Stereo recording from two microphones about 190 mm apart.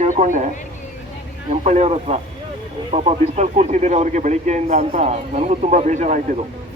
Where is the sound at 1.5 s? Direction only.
35° right (ahead or behind).